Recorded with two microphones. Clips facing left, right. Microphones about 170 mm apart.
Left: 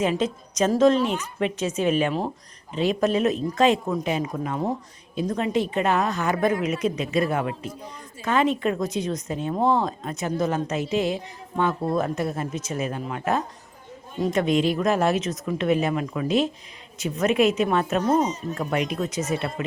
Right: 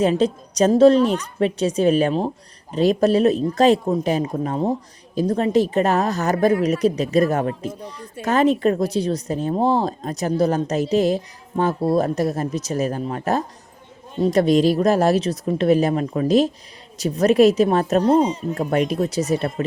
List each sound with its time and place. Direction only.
0.0 s a woman's voice: 35° right (ahead or behind)